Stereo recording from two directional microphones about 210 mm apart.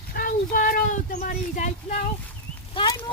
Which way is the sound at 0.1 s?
40° left (ahead or behind).